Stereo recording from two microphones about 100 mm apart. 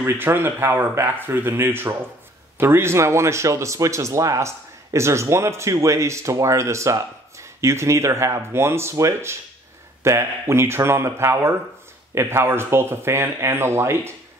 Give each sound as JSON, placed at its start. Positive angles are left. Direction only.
{"t": 0.0, "sound": "speech", "side_deg": -20}